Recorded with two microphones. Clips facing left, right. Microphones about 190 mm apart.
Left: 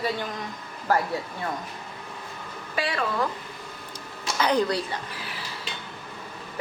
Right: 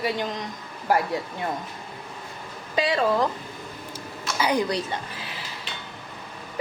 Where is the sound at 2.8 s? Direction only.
20° right (ahead or behind).